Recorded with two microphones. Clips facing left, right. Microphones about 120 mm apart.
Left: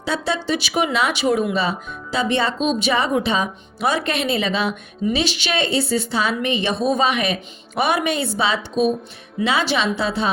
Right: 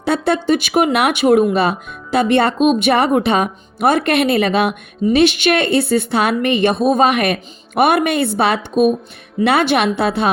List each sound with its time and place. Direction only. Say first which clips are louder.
0.0 s speech: right 7 dB; 55° right (ahead or behind)